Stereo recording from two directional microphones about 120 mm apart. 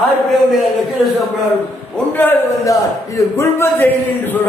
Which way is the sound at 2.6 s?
25° left (ahead or behind).